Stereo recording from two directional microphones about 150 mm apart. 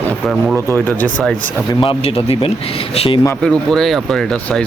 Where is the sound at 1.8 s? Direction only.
40° left (ahead or behind).